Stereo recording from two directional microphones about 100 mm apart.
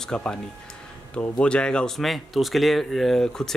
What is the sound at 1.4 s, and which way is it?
Speech, 10° left (ahead or behind).